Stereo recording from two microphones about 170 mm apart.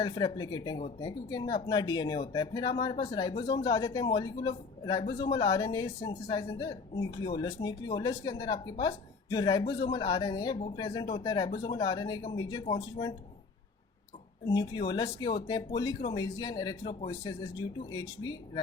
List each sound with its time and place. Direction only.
0.0 s speech: 25° left (ahead or behind)
14.4 s speech: 25° left (ahead or behind)